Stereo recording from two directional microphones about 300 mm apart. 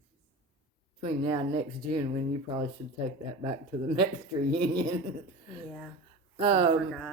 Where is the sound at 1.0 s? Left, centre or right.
Centre.